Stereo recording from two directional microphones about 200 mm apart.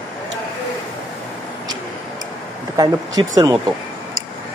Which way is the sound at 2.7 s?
20° right (ahead or behind).